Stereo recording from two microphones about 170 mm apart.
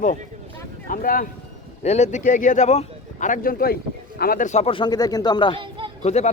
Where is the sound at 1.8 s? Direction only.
40° left (ahead or behind).